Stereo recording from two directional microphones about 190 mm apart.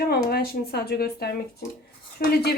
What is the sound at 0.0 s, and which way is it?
A woman's voice, 55° left (ahead or behind).